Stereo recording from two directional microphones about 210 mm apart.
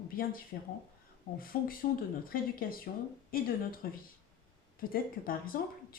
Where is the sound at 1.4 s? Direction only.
45° left (ahead or behind).